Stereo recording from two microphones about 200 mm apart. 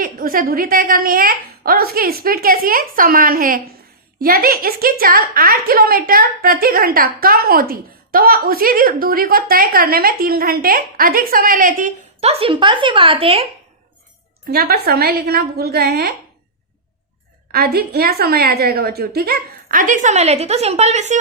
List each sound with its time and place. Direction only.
0.0 s a woman's voice: 45° right (ahead or behind); by 13.5 s 30° right (ahead or behind)
14.4 s a woman's voice: 50° right (ahead or behind)
17.5 s a woman's voice: 50° right (ahead or behind)